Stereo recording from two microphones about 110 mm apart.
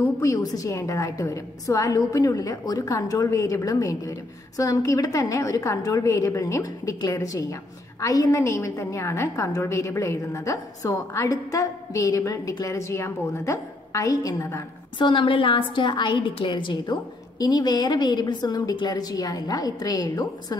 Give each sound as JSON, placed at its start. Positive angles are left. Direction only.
{"t": 0.0, "sound": "a woman's voice", "side_deg": 30}
{"t": 15.0, "sound": "a woman's voice", "side_deg": 45}